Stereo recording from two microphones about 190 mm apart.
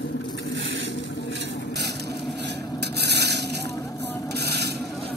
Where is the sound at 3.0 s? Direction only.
60° right (ahead or behind).